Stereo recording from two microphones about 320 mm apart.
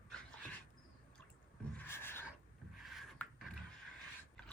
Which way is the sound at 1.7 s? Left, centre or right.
Centre.